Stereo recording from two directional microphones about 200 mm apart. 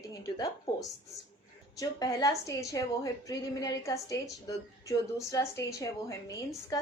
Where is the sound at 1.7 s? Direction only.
15° left (ahead or behind).